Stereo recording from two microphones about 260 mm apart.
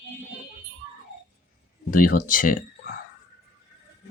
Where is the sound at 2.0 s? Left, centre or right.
Left.